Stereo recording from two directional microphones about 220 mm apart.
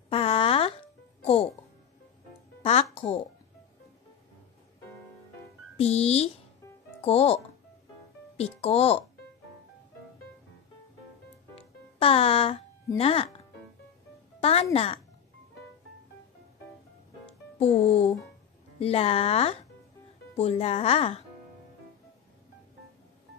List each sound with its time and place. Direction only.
0.1 s a sound: 25° left (ahead or behind)
2.6 s speech: 30° left (ahead or behind)
5.8 s speech: 30° left (ahead or behind)
8.4 s speech: 30° left (ahead or behind)
11.5 s music: 25° left (ahead or behind)
14.4 s speech: 25° left (ahead or behind)
17.6 s speech: 25° left (ahead or behind)